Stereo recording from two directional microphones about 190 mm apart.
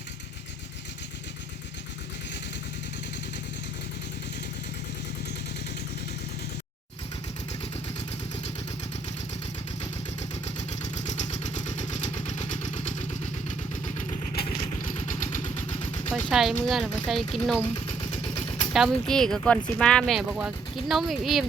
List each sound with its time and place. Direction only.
10.2 s vehicle: 35° left (ahead or behind)
16.3 s speech: centre (ahead or behind)
18.7 s speech: centre (ahead or behind)